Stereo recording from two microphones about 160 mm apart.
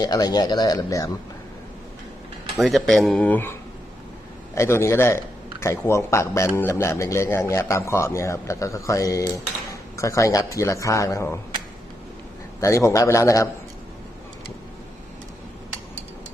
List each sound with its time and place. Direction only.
0.0 s speech: 25° left (ahead or behind)
2.6 s speech: centre (ahead or behind); by 11.3 s 20° left (ahead or behind)
12.5 s speech: 20° left (ahead or behind)